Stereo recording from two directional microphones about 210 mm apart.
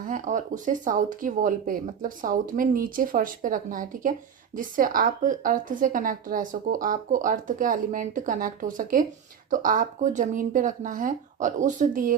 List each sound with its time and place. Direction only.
0.1 s a woman's voice: 35° right (ahead or behind)